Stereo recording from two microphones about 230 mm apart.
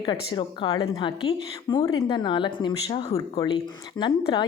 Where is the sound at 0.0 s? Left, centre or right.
Centre.